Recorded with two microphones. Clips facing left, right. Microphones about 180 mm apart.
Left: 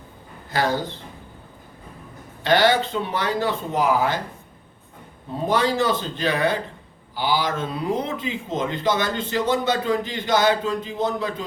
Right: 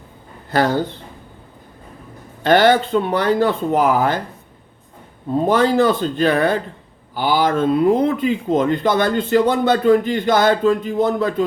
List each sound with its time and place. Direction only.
0.5 s speech: 55° right (ahead or behind)
2.4 s speech: 50° right (ahead or behind)
5.5 s speech: 55° right (ahead or behind)